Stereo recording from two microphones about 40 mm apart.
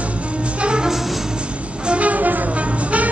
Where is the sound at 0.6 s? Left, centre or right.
Right.